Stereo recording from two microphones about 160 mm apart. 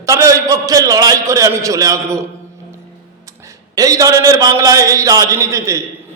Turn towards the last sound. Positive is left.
turn(degrees=-20)  # may be behind; listen again after turning